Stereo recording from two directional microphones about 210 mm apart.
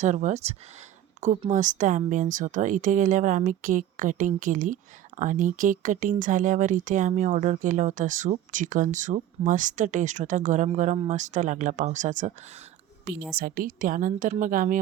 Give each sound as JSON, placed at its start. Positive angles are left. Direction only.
{"t": 0.0, "sound": "speech", "side_deg": -35}
{"t": 13.3, "sound": "speech", "side_deg": -45}